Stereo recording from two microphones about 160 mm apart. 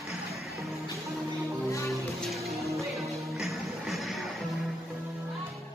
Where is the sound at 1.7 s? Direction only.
20° left (ahead or behind).